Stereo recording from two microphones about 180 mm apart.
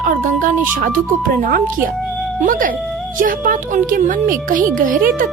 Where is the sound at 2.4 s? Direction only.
50° right (ahead or behind).